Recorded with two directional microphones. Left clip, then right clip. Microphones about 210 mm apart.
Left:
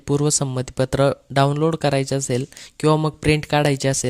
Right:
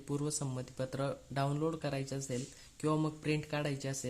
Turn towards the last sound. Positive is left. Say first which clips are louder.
# left 19 dB
turn(degrees=50)  # may be behind; listen again after turning